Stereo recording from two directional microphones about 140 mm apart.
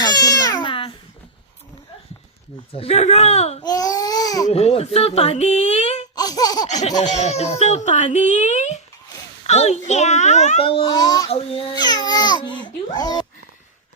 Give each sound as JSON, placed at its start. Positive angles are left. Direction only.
{"t": 0.0, "sound": "baby cry", "side_deg": 30}
{"t": 2.7, "sound": "speech", "side_deg": 45}
{"t": 3.6, "sound": "baby cry", "side_deg": 25}
{"t": 4.4, "sound": "speech", "side_deg": 50}
{"t": 6.1, "sound": "laughter", "side_deg": 25}
{"t": 7.0, "sound": "a child's voice", "side_deg": 55}
{"t": 10.8, "sound": "speech", "side_deg": 30}